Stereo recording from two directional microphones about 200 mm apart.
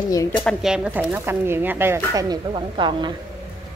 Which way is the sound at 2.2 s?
20° right (ahead or behind).